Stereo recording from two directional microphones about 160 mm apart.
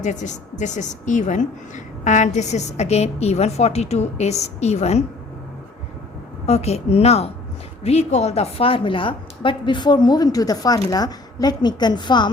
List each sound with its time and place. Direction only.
0.0 s a woman's voice: 50° left (ahead or behind)
6.4 s a woman's voice: 40° left (ahead or behind)